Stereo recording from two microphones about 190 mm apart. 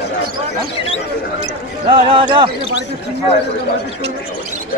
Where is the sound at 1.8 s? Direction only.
25° right (ahead or behind).